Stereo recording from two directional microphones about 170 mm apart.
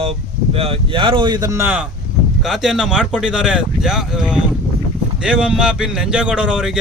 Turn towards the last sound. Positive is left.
turn(degrees=-5)  # may be behind; listen again after turning